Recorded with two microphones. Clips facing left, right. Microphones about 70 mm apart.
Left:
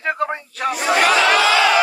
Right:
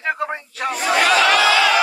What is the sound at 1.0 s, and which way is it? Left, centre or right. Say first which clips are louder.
Crowd: even; left.